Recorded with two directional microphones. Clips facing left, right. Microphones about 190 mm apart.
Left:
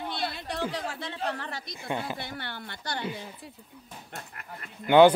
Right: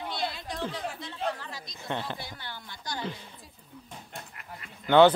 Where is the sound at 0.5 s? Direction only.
65° left (ahead or behind).